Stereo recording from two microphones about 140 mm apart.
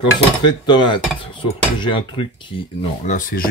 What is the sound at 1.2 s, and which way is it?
Cutlery, 35° left (ahead or behind).